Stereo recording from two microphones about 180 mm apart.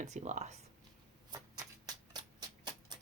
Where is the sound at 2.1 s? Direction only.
25° right (ahead or behind).